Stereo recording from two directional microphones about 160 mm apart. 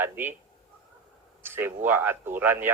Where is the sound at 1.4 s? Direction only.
15° right (ahead or behind).